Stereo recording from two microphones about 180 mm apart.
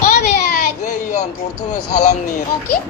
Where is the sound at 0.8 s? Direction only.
40° left (ahead or behind).